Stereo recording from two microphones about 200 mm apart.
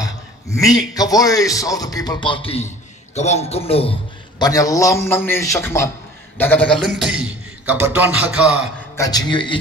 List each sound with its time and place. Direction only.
0.0 s a man's voice: 15° left (ahead or behind)
4.4 s a man's voice: 15° left (ahead or behind); by 8.5 s 5° right (ahead or behind)
8.9 s speech: 20° left (ahead or behind)